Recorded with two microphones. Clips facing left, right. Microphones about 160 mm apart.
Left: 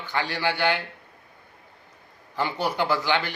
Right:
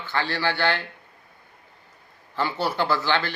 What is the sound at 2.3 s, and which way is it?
Speech, 15° left (ahead or behind).